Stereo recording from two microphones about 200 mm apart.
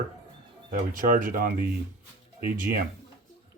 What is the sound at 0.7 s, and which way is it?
Speech, 45° right (ahead or behind).